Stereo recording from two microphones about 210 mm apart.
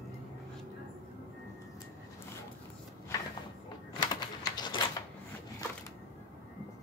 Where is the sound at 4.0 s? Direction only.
20° left (ahead or behind).